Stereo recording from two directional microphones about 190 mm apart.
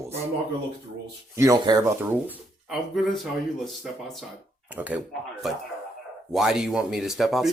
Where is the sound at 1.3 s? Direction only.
20° right (ahead or behind).